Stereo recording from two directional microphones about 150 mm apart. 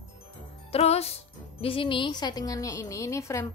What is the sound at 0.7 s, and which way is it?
Speech, 45° left (ahead or behind).